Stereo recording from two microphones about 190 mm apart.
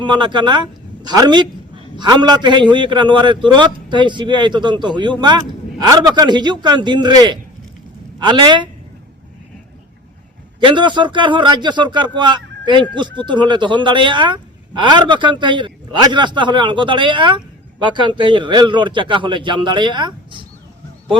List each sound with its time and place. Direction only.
0.0 s a man's voice: 25° right (ahead or behind)
10.6 s a man's voice: 25° right (ahead or behind)